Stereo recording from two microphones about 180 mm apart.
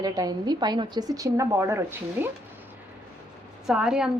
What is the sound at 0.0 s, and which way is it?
A woman's voice, 20° right (ahead or behind).